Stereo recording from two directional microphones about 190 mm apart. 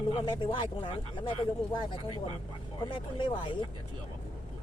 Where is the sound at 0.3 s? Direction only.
25° left (ahead or behind).